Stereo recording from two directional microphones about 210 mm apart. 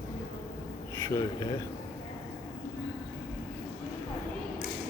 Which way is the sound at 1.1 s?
15° left (ahead or behind).